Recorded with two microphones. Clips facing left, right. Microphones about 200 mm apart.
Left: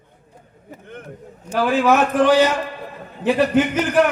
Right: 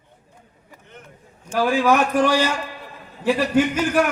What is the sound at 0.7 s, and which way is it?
Vehicle, 55° left (ahead or behind).